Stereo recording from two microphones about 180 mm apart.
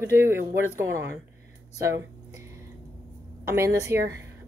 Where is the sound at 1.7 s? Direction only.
15° right (ahead or behind).